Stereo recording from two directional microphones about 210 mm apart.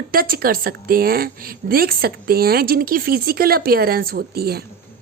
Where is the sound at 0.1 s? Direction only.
45° right (ahead or behind).